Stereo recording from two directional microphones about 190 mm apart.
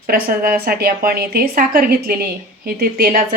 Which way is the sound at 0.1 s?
50° right (ahead or behind).